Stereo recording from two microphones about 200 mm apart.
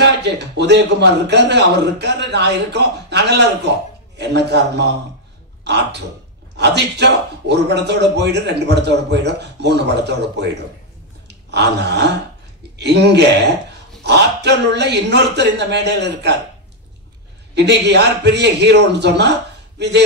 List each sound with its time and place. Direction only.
0.0 s speech: 55° right (ahead or behind)
11.2 s a sound: 60° right (ahead or behind)
12.7 s speech: 55° right (ahead or behind)
17.6 s speech: 60° right (ahead or behind)